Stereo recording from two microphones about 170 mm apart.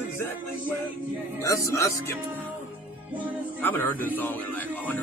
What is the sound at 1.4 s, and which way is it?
Speech, 20° left (ahead or behind).